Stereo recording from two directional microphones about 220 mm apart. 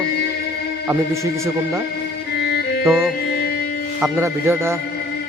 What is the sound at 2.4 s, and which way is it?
Music, 45° left (ahead or behind).